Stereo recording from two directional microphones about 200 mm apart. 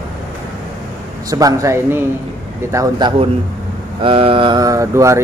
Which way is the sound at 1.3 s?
15° right (ahead or behind).